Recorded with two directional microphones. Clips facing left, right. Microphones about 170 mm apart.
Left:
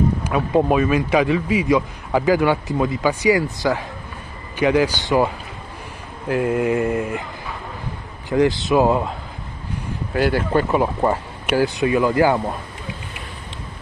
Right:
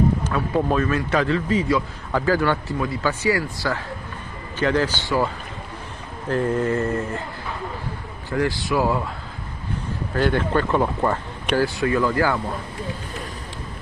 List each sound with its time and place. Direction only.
0.2 s a man's voice: 20° left (ahead or behind)
8.3 s speech: 20° left (ahead or behind)
10.1 s a man's voice: 10° left (ahead or behind)